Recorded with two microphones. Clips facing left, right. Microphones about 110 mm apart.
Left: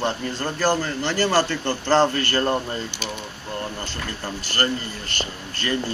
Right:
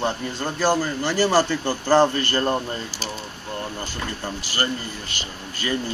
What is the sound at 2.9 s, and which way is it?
Speech, 35° right (ahead or behind).